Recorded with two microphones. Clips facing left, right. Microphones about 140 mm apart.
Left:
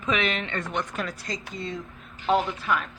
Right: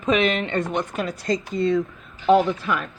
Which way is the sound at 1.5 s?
45° right (ahead or behind).